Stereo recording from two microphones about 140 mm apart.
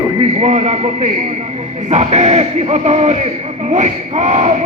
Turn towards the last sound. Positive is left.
turn(degrees=-50)  # may be behind; listen again after turning